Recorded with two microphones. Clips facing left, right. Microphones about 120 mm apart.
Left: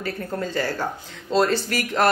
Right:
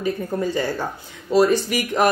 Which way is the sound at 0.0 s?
15° right (ahead or behind).